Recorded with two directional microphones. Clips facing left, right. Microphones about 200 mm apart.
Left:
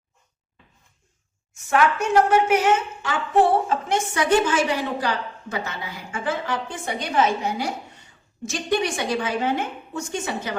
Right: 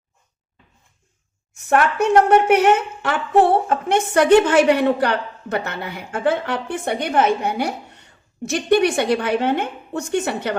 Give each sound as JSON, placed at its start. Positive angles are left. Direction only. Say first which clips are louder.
{"t": 1.5, "sound": "a woman's voice", "louder": "right 3 dB", "side_deg": -60}